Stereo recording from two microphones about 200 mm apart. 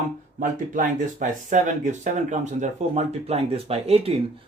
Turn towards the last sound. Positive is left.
turn(degrees=-30)  # may be behind; listen again after turning